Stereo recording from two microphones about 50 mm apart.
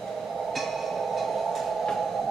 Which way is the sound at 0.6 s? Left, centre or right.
Centre.